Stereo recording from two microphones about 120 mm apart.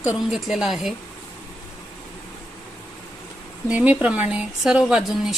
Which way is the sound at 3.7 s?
15° right (ahead or behind).